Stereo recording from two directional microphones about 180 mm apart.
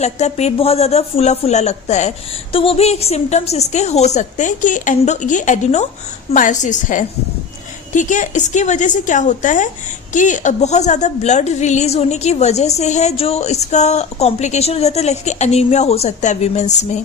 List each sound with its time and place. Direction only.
0.0 s a woman's voice: 40° left (ahead or behind)